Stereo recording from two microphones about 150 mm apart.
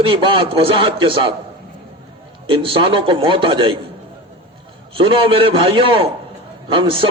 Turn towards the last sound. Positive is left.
turn(degrees=-35)  # may be behind; listen again after turning